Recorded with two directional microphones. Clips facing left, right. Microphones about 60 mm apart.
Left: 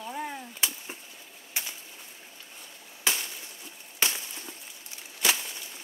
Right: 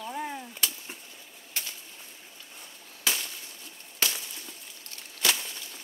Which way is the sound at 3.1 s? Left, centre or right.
Centre.